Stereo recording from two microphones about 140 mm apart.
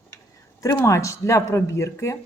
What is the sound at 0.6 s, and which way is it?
Speech, 25° left (ahead or behind).